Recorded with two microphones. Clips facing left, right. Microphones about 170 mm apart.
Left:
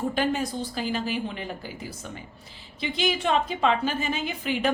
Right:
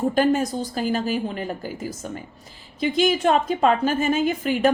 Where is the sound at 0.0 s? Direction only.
45° right (ahead or behind).